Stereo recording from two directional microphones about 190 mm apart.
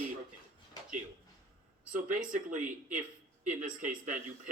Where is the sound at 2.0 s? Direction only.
45° right (ahead or behind).